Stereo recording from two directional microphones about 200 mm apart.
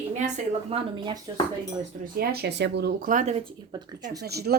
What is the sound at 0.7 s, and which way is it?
Speech, 20° right (ahead or behind).